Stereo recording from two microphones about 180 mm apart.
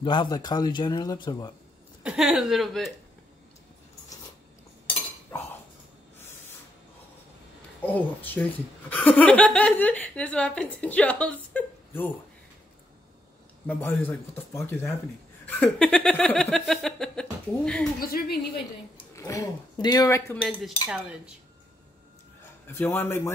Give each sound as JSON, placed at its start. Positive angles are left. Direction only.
{"t": 0.0, "sound": "speech", "side_deg": 25}
{"t": 2.0, "sound": "speech", "side_deg": -5}
{"t": 7.8, "sound": "speech", "side_deg": 10}
{"t": 13.7, "sound": "speech", "side_deg": 10}
{"t": 15.4, "sound": "a sound", "side_deg": 10}
{"t": 18.0, "sound": "a woman's voice", "side_deg": 55}
{"t": 19.1, "sound": "speech", "side_deg": 15}
{"t": 20.3, "sound": "speech", "side_deg": 0}
{"t": 22.7, "sound": "speech", "side_deg": 10}